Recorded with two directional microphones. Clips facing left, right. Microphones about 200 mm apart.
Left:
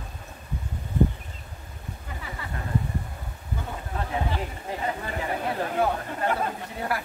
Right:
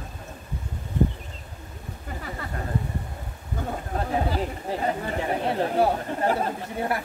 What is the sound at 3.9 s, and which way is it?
Chatter, 35° right (ahead or behind).